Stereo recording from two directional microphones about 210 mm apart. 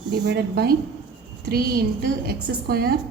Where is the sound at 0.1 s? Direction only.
50° right (ahead or behind).